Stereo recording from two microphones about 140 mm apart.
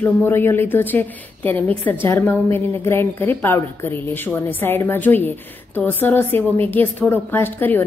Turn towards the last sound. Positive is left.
turn(degrees=15)  # may be behind; listen again after turning